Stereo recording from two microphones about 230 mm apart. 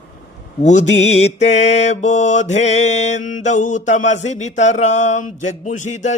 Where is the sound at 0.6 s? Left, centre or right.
Left.